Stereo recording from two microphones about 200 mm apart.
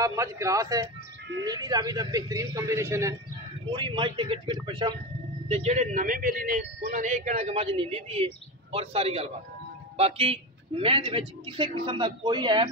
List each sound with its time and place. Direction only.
0.0 s a man's voice: 15° right (ahead or behind)
3.7 s a man's voice: 25° right (ahead or behind)